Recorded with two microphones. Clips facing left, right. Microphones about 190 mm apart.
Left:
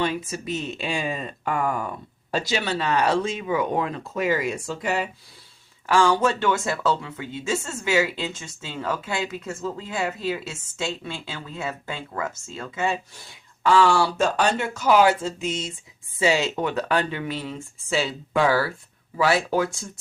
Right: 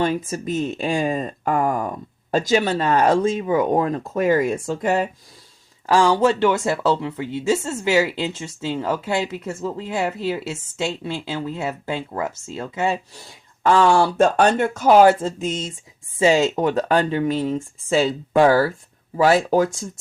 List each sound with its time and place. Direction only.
0.0 s speech: 45° right (ahead or behind)
5.8 s speech: 35° right (ahead or behind)